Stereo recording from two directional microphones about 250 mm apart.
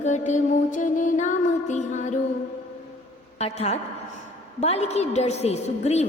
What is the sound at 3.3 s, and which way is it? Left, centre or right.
A woman's voice, left.